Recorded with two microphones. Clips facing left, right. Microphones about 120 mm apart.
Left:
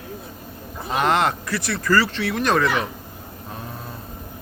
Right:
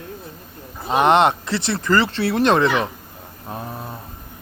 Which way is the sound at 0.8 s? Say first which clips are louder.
Right 5 dB; 25° right (ahead or behind).